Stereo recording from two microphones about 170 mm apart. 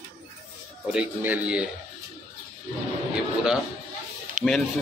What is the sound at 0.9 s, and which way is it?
Speech, 10° right (ahead or behind).